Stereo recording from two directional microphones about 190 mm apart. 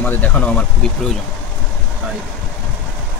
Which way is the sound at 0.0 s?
10° left (ahead or behind).